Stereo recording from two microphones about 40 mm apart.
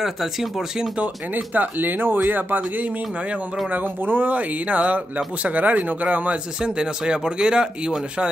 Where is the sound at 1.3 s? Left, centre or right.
Right.